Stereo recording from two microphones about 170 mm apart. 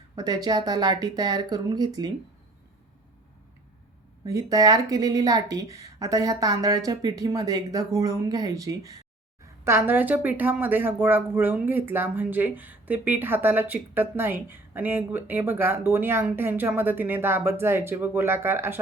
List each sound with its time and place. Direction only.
0.2 s speech: 25° right (ahead or behind)
4.3 s speech: 20° right (ahead or behind)